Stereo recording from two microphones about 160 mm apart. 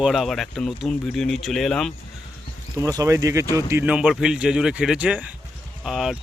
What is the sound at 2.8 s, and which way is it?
Speech, 20° right (ahead or behind).